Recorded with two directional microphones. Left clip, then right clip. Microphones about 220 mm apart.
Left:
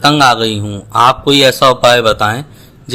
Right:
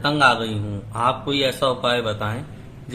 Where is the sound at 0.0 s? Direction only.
45° left (ahead or behind).